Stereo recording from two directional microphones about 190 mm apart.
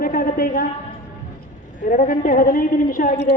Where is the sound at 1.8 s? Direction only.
45° left (ahead or behind).